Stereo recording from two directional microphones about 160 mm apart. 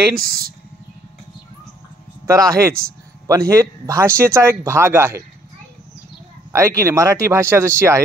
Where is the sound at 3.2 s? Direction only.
20° right (ahead or behind).